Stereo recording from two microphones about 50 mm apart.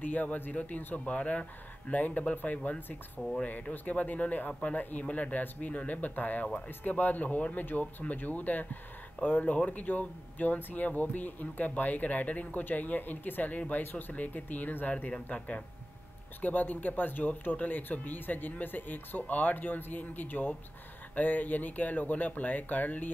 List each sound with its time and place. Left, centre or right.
0.0 s speech: left
16.3 s speech: left